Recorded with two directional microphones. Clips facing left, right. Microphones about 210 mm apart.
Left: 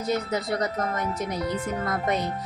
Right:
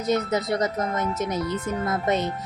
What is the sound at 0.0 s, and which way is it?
Speech, 20° right (ahead or behind).